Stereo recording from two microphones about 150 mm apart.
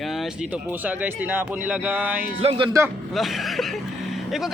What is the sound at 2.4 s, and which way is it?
Speech, 35° right (ahead or behind).